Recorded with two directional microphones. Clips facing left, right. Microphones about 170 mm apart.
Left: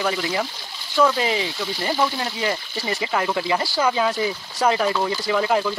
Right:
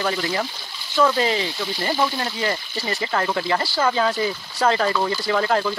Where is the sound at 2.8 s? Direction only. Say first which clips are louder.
Even; 15° left (ahead or behind).